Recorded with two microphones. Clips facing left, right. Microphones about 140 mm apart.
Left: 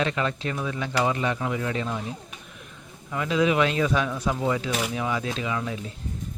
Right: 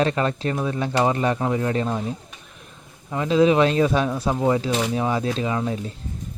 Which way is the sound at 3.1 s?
30° right (ahead or behind).